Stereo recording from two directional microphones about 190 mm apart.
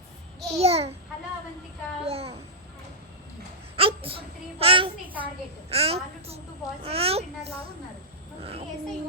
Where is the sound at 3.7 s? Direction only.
30° right (ahead or behind).